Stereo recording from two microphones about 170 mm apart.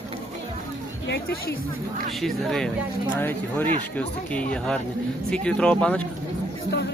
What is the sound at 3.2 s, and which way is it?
Speech, 10° left (ahead or behind).